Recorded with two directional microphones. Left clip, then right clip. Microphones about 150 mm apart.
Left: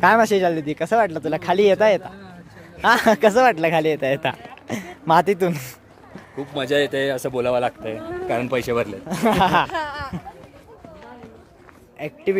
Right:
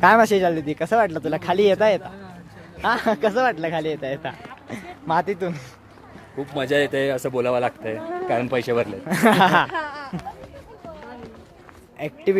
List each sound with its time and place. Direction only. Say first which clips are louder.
0.0 s speech: even; 10° left (ahead or behind); by 2.1 s 25° left (ahead or behind)
2.8 s speech: left 5 dB; 45° left (ahead or behind); by 5.7 s 90° left
6.3 s speech: even; 35° left (ahead or behind)
8.3 s speech: even; 50° left (ahead or behind)
9.0 s speech: right 3 dB; 10° right (ahead or behind)
9.7 s a sound: left 2 dB; 85° left
12.0 s speech: right 1 dB; 10° left (ahead or behind)